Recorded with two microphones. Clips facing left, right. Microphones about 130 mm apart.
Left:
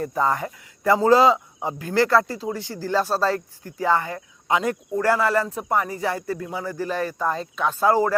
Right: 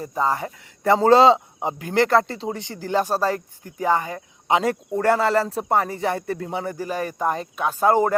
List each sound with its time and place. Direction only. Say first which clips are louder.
0.3 s speech: even; 25° right (ahead or behind)
6.7 s speech: left 1 dB; 15° right (ahead or behind)
7.9 s speech: right 1 dB; 25° right (ahead or behind)